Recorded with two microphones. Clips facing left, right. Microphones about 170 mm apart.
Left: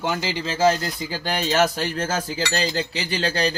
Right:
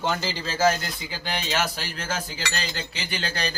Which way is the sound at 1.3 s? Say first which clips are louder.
Left 7 dB; 40° left (ahead or behind).